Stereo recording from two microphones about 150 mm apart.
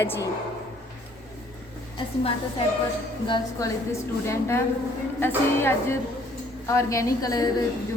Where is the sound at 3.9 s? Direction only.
20° left (ahead or behind).